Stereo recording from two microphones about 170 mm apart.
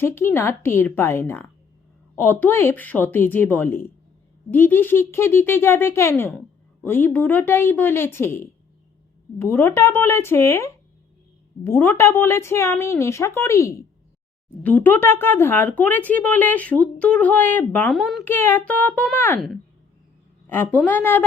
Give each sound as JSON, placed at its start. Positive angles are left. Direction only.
{"t": 0.0, "sound": "speech", "side_deg": 15}
{"t": 20.5, "sound": "speech", "side_deg": 10}